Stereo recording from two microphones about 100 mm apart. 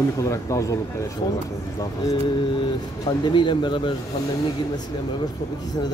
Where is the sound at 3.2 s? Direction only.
50° left (ahead or behind).